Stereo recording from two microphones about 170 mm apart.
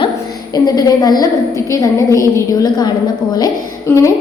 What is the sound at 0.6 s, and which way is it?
Speech, 20° left (ahead or behind).